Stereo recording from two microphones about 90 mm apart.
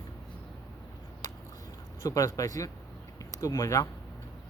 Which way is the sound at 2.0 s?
40° left (ahead or behind).